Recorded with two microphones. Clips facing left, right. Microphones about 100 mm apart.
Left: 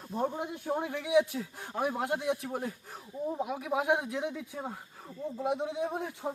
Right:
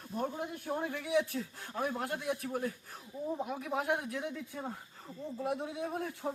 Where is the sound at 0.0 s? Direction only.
25° left (ahead or behind).